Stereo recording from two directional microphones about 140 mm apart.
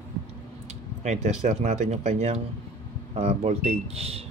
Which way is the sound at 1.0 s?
55° right (ahead or behind).